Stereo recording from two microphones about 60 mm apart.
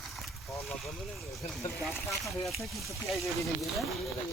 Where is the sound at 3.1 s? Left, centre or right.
Centre.